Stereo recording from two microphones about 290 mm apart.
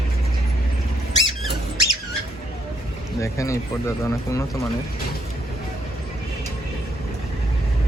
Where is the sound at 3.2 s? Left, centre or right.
Centre.